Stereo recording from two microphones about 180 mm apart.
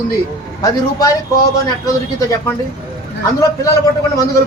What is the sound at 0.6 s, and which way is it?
Speech, 20° left (ahead or behind).